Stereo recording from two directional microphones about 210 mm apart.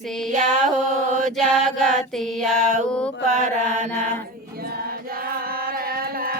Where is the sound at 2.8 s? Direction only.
5° left (ahead or behind).